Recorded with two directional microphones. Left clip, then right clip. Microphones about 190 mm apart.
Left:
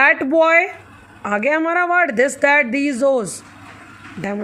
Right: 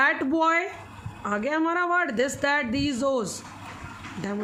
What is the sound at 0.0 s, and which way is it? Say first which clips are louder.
A woman's voice: left 9 dB; 35° left (ahead or behind).